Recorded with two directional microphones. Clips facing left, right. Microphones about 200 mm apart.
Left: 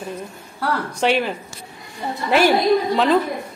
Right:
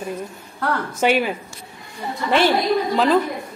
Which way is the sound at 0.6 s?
Centre (ahead or behind).